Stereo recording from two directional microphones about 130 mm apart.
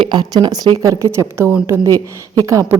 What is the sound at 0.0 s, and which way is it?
A woman's voice, 35° right (ahead or behind).